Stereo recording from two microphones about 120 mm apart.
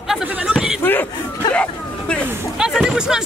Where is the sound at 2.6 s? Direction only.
5° right (ahead or behind).